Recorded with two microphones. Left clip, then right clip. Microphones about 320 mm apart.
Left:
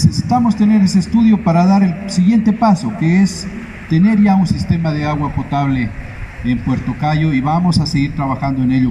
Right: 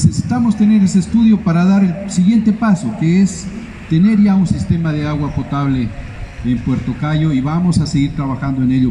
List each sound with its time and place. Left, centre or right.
0.0 s a man's voice: centre
7.0 s a man's voice: centre